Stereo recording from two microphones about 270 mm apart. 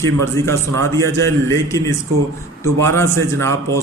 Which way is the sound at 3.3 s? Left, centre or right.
Centre.